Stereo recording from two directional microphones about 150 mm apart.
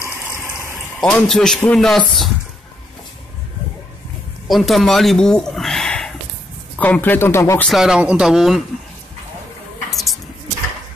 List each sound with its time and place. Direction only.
0.1 s water: 20° right (ahead or behind)
1.0 s speech: 5° left (ahead or behind)
4.5 s speech: centre (ahead or behind); by 7.6 s 15° left (ahead or behind)
7.6 s speech: centre (ahead or behind)
9.8 s a sound: centre (ahead or behind)